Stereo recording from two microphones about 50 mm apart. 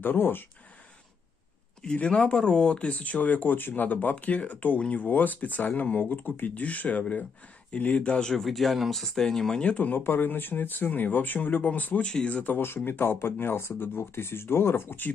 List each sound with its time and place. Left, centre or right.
0.0 s speech: left
1.8 s speech: centre
2.9 s speech: left
8.3 s speech: centre
9.8 s speech: left
12.0 s speech: centre
12.4 s speech: left